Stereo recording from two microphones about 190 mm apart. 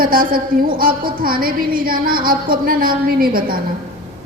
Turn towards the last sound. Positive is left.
turn(degrees=-50)  # may be behind; listen again after turning